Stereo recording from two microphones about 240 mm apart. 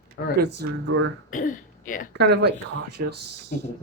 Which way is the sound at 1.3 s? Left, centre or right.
Left.